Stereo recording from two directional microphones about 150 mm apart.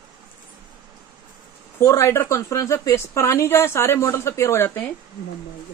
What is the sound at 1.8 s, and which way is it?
Speech, 20° left (ahead or behind).